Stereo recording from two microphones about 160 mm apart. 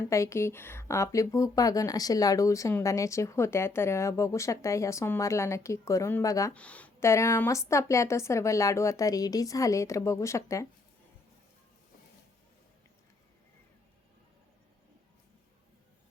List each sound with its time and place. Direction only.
0.0 s speech: 15° left (ahead or behind)
6.5 s speech: 10° left (ahead or behind)